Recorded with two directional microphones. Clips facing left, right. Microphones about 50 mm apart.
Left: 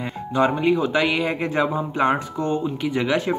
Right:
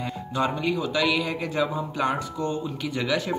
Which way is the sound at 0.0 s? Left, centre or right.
Left.